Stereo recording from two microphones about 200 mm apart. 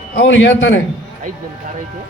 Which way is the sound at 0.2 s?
70° left (ahead or behind).